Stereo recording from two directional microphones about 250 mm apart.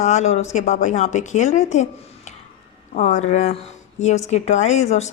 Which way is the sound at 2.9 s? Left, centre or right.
Left.